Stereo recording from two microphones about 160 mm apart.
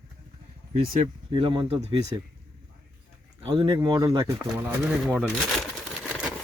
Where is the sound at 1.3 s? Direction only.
30° right (ahead or behind).